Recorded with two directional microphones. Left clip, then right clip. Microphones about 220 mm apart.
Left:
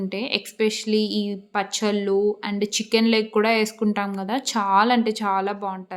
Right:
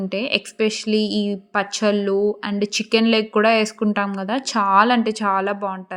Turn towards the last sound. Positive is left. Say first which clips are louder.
# right 3 dB
turn(degrees=-15)  # may be behind; listen again after turning